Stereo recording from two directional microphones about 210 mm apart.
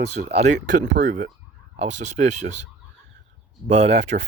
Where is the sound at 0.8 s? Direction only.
35° right (ahead or behind).